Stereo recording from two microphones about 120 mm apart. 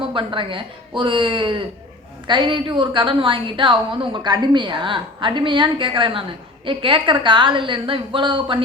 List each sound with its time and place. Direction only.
0.1 s a woman's voice: 45° right (ahead or behind)